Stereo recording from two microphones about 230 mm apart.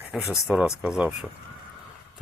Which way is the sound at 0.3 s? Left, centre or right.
Centre.